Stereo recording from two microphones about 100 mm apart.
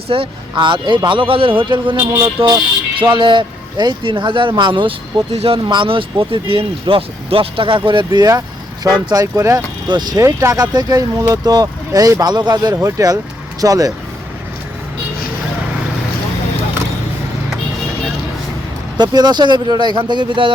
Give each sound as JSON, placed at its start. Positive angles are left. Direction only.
{"t": 0.1, "sound": "speech", "side_deg": -60}
{"t": 3.0, "sound": "a man's voice", "side_deg": -55}
{"t": 5.3, "sound": "speech", "side_deg": -85}
{"t": 5.6, "sound": "speech", "side_deg": -55}
{"t": 8.3, "sound": "speech", "side_deg": -40}
{"t": 9.9, "sound": "a man's voice", "side_deg": -45}
{"t": 10.2, "sound": "speech", "side_deg": -30}
{"t": 12.7, "sound": "speech", "side_deg": -35}
{"t": 18.9, "sound": "a man's voice", "side_deg": -45}